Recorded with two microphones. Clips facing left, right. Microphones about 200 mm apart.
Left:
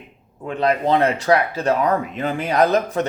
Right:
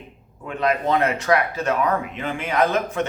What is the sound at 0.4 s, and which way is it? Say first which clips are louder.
Speech: left 3 dB; 30° left (ahead or behind).